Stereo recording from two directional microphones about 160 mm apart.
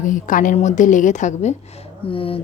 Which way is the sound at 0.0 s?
55° left (ahead or behind).